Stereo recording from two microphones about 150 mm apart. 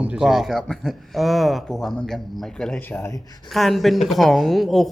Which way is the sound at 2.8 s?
15° left (ahead or behind).